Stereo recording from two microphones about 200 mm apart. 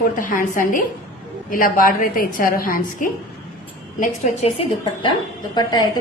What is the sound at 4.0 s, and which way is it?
A woman's voice, 30° left (ahead or behind).